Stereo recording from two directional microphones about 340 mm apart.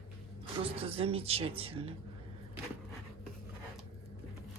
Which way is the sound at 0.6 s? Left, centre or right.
Centre.